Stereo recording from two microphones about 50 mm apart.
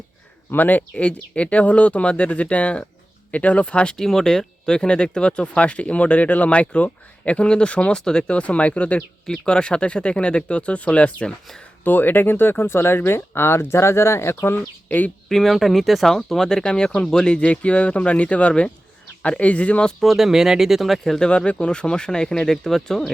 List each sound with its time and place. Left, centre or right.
0.5 s speech: left
3.9 s speech: centre
8.4 s speech: left
9.0 s speech: centre
11.8 s speech: left
14.8 s speech: left
15.3 s speech: centre; by 19.8 s left
20.0 s speech: centre
21.2 s speech: left; by 23.1 s centre